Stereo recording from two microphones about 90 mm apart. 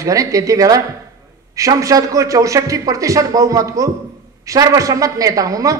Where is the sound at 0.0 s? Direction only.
40° right (ahead or behind).